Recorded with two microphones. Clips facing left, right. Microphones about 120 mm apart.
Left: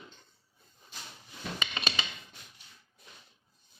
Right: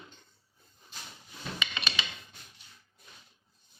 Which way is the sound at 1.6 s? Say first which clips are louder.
Left 1 dB; 40° left (ahead or behind).